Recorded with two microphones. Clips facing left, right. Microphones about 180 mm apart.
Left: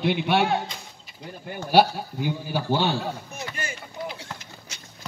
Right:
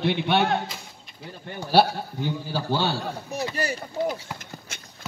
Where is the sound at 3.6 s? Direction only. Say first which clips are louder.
Right 7 dB; 40° right (ahead or behind).